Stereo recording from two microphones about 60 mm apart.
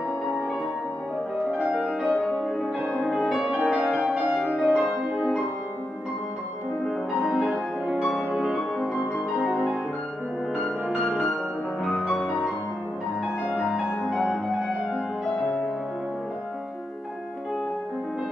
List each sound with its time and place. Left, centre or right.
1.9 s music: centre
7.2 s music: centre
8.3 s music: centre
11.0 s music: centre
13.6 s music: centre
14.0 s music: centre
14.8 s music: centre